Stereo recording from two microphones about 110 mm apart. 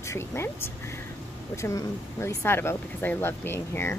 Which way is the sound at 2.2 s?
25° left (ahead or behind).